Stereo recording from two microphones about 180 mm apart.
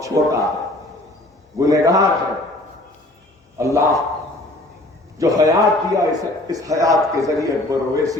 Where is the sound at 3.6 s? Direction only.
15° right (ahead or behind).